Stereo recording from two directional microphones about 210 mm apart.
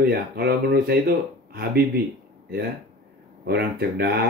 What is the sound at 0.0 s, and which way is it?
Speech, 45° right (ahead or behind).